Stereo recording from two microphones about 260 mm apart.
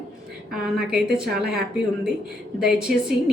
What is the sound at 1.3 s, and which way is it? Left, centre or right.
Speech, right.